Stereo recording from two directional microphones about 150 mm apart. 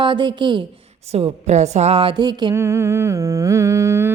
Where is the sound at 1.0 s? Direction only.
45° right (ahead or behind); by 4.1 s 20° right (ahead or behind).